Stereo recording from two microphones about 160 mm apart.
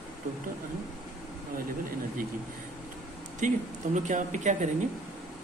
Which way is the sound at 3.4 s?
50° right (ahead or behind).